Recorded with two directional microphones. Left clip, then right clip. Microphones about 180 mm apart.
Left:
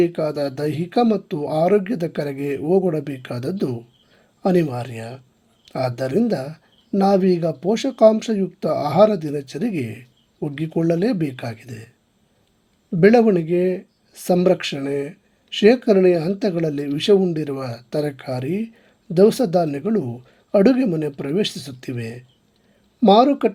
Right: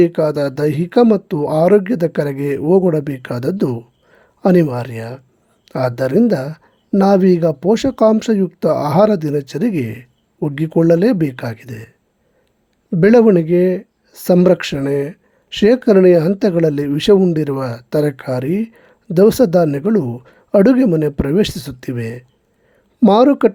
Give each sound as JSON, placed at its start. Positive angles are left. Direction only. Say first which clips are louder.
{"t": 0.0, "sound": "speech", "louder": "right 6 dB", "side_deg": -30}
{"t": 13.0, "sound": "speech", "louder": "right 4 dB", "side_deg": -35}